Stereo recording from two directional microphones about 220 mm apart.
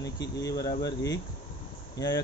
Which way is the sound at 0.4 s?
15° left (ahead or behind).